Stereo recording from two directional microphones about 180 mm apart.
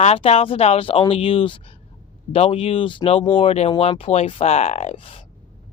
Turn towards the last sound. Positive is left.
turn(degrees=30)  # may be behind; listen again after turning